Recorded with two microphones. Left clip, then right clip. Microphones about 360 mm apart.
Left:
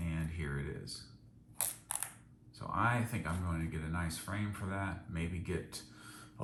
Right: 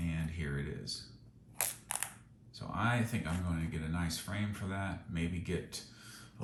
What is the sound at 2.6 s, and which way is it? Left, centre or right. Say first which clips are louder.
Speech: left 1 dB; centre.